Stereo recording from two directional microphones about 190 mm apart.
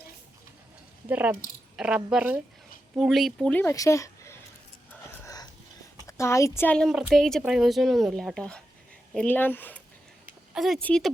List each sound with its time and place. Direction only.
1.0 s speech: 10° right (ahead or behind); by 4.4 s 15° left (ahead or behind)
5.2 s dog: 20° left (ahead or behind)
6.1 s speech: 15° left (ahead or behind)
10.2 s speech: centre (ahead or behind)